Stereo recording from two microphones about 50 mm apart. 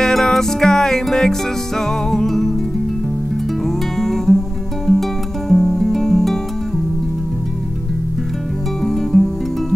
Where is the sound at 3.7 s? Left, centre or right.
Centre.